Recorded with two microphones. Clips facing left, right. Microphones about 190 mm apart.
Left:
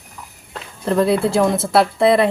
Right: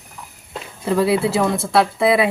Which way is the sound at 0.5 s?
5° right (ahead or behind).